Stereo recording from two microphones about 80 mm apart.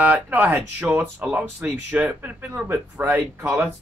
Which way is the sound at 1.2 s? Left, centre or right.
Centre.